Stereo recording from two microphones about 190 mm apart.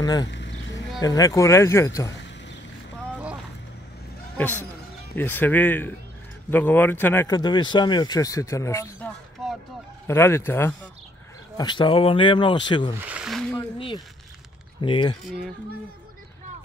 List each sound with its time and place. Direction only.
0.0 s speech: 20° left (ahead or behind)
0.3 s a sound: 70° left (ahead or behind)
1.0 s speech: 20° left (ahead or behind)
4.4 s speech: 10° left (ahead or behind)
7.3 s speech: 25° left (ahead or behind)
11.5 s speech: 25° left (ahead or behind)
13.0 s a sound: 5° right (ahead or behind)
13.6 s a sound: 25° left (ahead or behind)
14.8 s speech: 25° left (ahead or behind)